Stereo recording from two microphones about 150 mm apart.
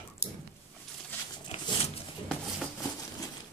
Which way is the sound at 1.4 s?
40° left (ahead or behind).